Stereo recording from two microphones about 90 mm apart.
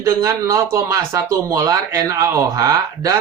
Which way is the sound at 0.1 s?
40° right (ahead or behind).